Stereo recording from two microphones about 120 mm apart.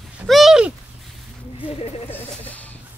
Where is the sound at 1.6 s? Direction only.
55° left (ahead or behind).